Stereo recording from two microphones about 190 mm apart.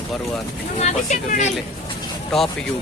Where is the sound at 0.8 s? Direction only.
40° left (ahead or behind).